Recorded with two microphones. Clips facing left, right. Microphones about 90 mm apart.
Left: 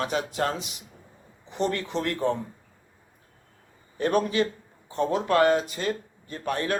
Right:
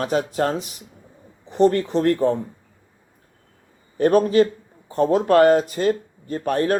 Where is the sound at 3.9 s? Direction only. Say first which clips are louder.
Right 8 dB; 40° right (ahead or behind).